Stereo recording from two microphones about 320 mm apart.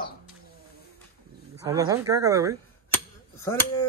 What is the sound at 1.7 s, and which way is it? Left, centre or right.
Speech, centre.